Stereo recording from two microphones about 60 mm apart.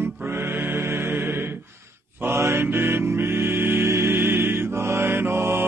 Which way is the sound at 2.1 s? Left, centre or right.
Right.